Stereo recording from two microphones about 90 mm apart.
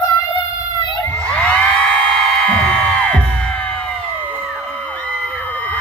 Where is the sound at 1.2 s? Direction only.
15° left (ahead or behind).